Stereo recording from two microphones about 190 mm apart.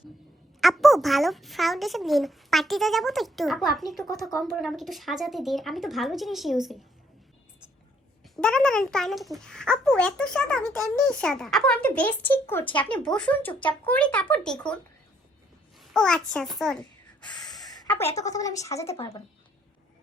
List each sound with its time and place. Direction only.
0.6 s a child's voice: centre (ahead or behind)
8.2 s a child's voice: 5° left (ahead or behind)
10.6 s a child's voice: 20° right (ahead or behind)
11.0 s a child's voice: 5° left (ahead or behind)
15.8 s a child's voice: centre (ahead or behind)
17.8 s speech: 10° left (ahead or behind)